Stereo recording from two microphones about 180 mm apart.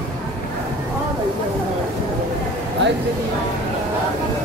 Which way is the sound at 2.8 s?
85° right.